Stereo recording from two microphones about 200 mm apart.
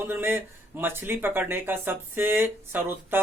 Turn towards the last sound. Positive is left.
turn(degrees=-10)  # may be behind; listen again after turning